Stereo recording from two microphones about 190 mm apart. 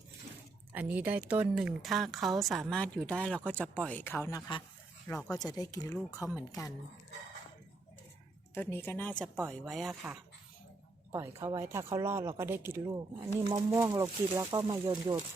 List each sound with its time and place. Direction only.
0.7 s speech: 10° right (ahead or behind); by 6.0 s 20° left (ahead or behind)
6.1 s speech: 10° right (ahead or behind)
6.5 s speech: 15° left (ahead or behind)
8.5 s speech: 10° left (ahead or behind)
11.1 s speech: 15° right (ahead or behind)